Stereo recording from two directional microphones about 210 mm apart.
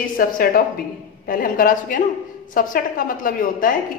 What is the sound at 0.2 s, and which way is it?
A woman's voice, 40° left (ahead or behind).